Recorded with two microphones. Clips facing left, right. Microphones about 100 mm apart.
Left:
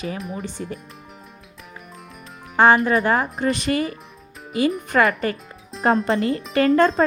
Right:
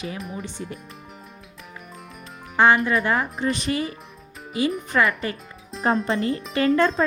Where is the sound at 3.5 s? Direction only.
60° left (ahead or behind).